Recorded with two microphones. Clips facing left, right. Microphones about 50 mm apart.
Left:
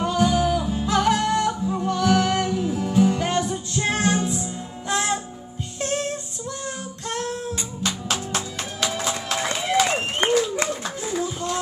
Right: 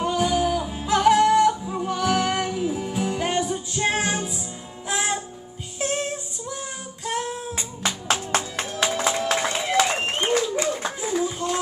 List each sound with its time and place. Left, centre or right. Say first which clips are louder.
0.0 s music: left 1 dB; centre
8.1 s music: right 3 dB; right
9.4 s a sound: even; centre
10.2 s clapping: left 3 dB; left
11.2 s music: right 1 dB; centre